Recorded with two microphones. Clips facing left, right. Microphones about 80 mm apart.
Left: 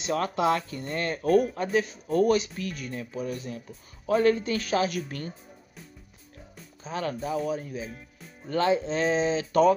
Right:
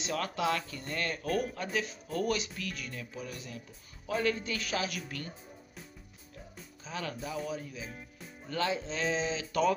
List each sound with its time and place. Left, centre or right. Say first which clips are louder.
0.0 s speech: left 7 dB; left
6.8 s speech: left 7 dB; left